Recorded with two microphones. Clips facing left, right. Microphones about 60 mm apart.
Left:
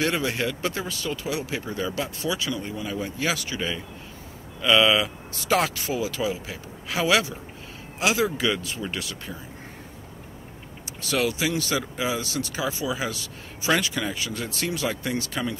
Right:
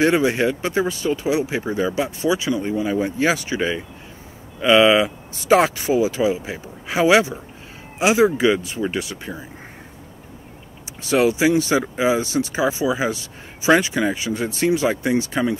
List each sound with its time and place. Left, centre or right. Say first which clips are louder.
0.0 s speech: right 8 dB; right
11.0 s speech: right 8 dB; right